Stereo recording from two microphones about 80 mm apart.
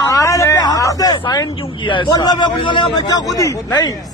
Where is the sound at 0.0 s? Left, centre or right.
Left.